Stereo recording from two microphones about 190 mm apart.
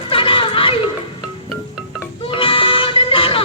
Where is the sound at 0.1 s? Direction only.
25° left (ahead or behind).